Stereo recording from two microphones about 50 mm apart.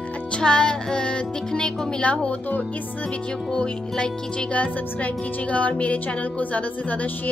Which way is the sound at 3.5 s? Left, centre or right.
Centre.